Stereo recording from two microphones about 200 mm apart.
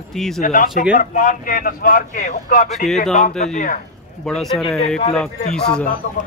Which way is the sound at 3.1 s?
35° left (ahead or behind).